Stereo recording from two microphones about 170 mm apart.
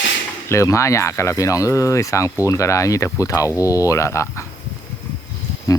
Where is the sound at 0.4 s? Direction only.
15° left (ahead or behind).